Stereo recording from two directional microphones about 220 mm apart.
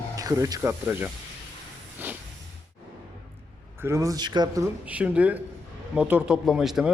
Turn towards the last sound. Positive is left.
turn(degrees=0)  # may be behind; listen again after turning